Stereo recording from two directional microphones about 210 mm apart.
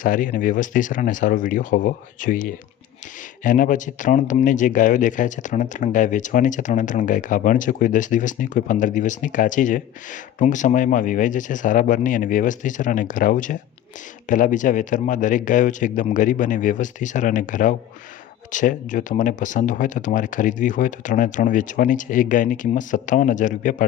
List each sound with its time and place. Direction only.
0.0 s speech: 40° left (ahead or behind)